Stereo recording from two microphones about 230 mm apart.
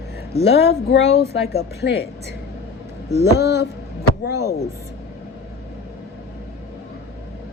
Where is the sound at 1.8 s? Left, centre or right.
Left.